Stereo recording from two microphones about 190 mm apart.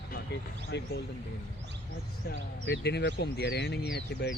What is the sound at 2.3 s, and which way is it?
Speech, 60° left (ahead or behind).